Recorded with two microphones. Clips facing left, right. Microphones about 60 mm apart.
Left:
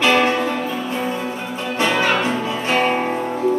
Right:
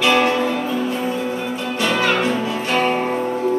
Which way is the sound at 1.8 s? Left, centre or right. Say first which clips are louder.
Even; left.